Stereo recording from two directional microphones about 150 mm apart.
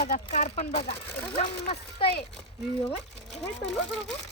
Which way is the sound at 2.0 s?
40° left (ahead or behind).